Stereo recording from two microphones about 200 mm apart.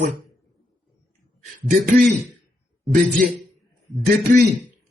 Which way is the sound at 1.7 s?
45° right (ahead or behind).